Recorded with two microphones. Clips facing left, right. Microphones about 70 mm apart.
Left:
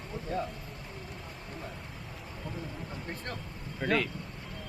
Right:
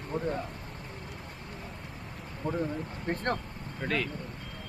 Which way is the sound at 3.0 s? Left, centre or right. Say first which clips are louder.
Right 12 dB; right.